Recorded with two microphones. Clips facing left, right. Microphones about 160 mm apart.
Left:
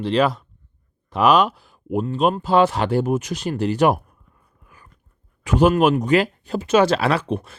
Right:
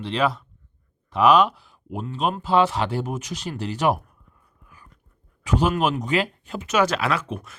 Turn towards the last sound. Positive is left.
turn(degrees=30)  # may be behind; listen again after turning